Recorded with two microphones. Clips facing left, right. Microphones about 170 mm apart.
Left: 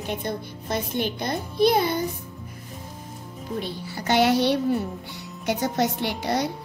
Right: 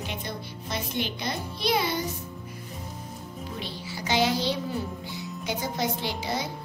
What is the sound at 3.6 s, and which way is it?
Speech, 55° left (ahead or behind).